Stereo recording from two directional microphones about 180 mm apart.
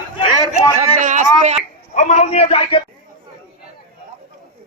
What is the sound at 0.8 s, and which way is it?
Speech, 45° right (ahead or behind).